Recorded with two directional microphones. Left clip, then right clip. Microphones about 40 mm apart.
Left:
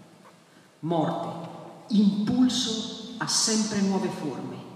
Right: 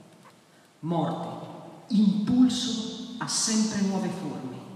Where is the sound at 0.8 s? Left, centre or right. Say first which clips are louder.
Left 3 dB; left.